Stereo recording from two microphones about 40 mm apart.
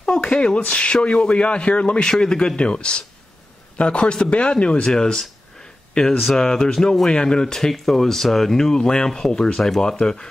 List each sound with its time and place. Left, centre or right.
0.1 s a man's voice: centre
6.3 s speech: centre
7.7 s speech: centre